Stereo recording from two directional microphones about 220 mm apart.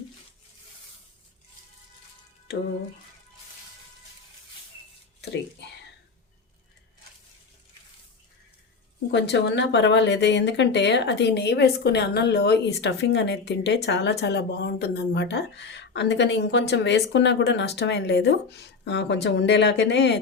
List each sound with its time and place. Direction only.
5.2 s speech: 50° left (ahead or behind)
9.1 s speech: 50° left (ahead or behind)